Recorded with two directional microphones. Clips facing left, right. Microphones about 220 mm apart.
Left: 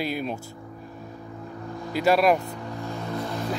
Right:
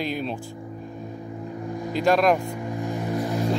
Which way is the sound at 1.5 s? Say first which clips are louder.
Right 4 dB; 15° right (ahead or behind).